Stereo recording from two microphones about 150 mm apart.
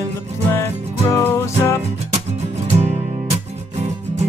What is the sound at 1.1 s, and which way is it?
Music, 15° left (ahead or behind).